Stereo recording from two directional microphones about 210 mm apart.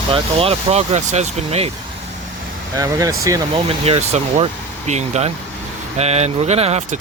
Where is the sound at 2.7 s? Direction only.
15° right (ahead or behind).